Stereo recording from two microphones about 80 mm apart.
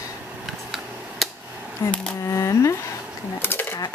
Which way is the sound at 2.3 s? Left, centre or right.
Left.